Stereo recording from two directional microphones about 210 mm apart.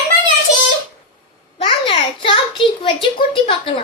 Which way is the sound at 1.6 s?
25° left (ahead or behind).